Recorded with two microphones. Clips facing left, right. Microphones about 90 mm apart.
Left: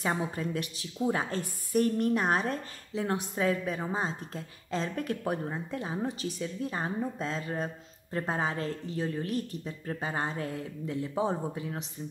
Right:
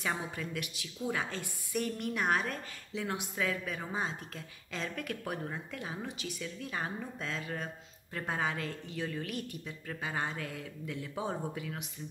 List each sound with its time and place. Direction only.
0.0 s a woman's voice: 40° left (ahead or behind)